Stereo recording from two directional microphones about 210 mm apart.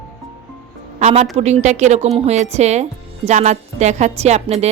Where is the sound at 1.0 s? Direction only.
30° right (ahead or behind).